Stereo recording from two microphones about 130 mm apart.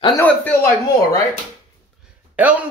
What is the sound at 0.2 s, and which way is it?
Speech, 15° left (ahead or behind).